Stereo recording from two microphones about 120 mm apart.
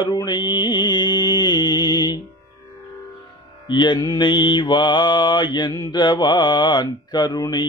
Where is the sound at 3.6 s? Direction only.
40° left (ahead or behind).